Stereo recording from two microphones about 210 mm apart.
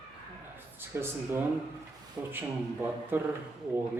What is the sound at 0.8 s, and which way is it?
Speech, 10° right (ahead or behind).